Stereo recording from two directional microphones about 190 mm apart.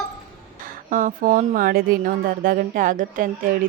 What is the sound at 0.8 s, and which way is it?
Speech, 45° right (ahead or behind).